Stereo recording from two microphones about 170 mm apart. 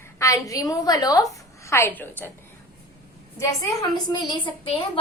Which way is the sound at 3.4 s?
20° left (ahead or behind).